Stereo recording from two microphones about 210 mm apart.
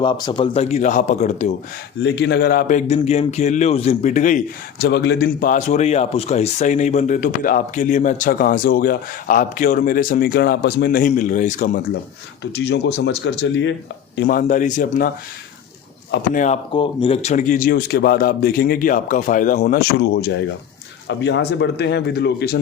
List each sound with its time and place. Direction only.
0.0 s speech: 20° left (ahead or behind)
2.0 s speech: 55° left (ahead or behind); by 4.9 s 35° left (ahead or behind)
4.9 s speech: 55° left (ahead or behind); by 11.7 s 40° left (ahead or behind)
12.4 s speech: 55° left (ahead or behind)
14.2 s speech: 40° left (ahead or behind)
16.3 s speech: 35° left (ahead or behind)
16.7 s speech: 25° left (ahead or behind); by 22.5 s 50° left (ahead or behind)